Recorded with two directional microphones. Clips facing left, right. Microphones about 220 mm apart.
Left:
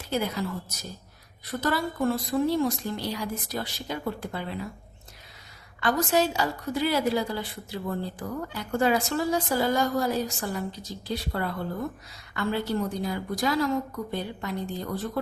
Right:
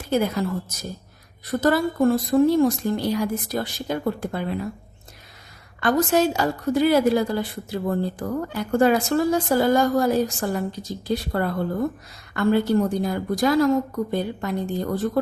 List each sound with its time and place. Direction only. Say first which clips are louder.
0.1 s a woman's voice: right 6 dB; 50° right (ahead or behind)
1.5 s a woman's voice: right 7 dB; 45° right (ahead or behind)
5.8 s a woman's voice: right 5 dB; 50° right (ahead or behind)